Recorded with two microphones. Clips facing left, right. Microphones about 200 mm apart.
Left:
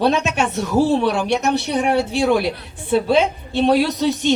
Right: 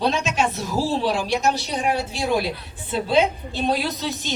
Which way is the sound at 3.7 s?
60° left (ahead or behind).